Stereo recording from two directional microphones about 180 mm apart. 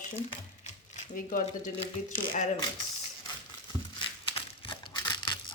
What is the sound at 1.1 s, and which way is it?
Speech, 50° left (ahead or behind).